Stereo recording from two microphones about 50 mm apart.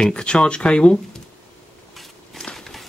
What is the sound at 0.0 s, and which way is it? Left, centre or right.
Speech, left.